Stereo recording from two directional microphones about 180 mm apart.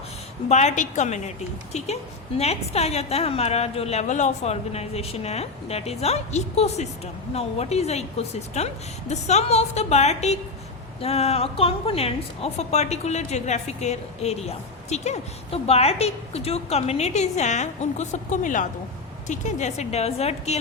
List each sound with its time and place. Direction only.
0.4 s a woman's voice: 40° left (ahead or behind)
2.4 s a woman's voice: 35° left (ahead or behind)